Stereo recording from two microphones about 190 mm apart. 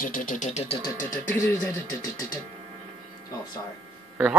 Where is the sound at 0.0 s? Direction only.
45° left (ahead or behind).